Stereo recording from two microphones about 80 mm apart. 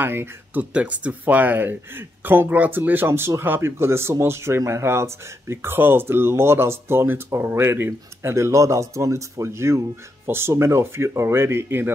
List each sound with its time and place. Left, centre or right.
0.0 s speech: right
0.7 s speech: centre